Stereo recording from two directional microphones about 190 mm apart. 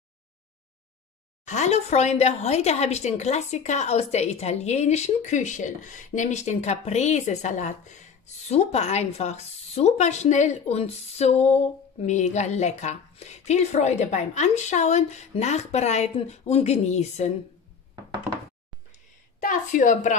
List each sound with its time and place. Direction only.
1.4 s a woman's voice: 40° left (ahead or behind)
19.4 s a woman's voice: 45° left (ahead or behind)